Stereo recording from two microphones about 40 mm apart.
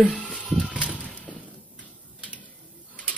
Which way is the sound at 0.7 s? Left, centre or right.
Right.